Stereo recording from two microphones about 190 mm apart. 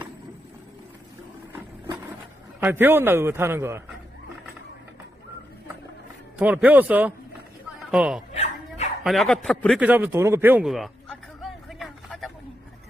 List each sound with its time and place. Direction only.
2.6 s a man's voice: 10° right (ahead or behind)
6.3 s a man's voice: 10° right (ahead or behind)
8.3 s dog: 35° left (ahead or behind)
9.0 s a sound: centre (ahead or behind)